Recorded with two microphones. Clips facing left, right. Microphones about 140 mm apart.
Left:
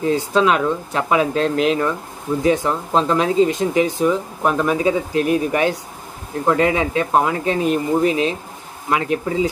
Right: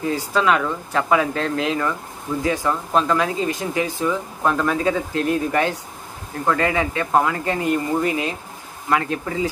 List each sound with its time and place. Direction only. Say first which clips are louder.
0.1 s speech: left 3 dB; 20° left (ahead or behind)